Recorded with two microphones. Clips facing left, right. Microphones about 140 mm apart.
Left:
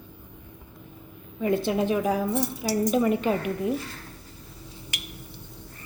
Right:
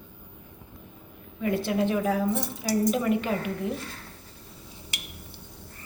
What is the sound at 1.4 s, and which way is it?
A woman's voice, 25° left (ahead or behind).